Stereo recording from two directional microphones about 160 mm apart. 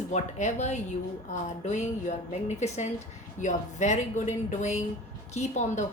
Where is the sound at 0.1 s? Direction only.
45° left (ahead or behind).